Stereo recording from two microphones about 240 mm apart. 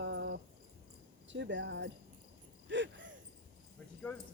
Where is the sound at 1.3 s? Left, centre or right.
Right.